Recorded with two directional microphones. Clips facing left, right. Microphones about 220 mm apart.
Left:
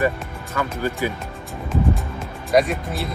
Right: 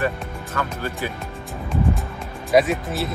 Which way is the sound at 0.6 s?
10° left (ahead or behind).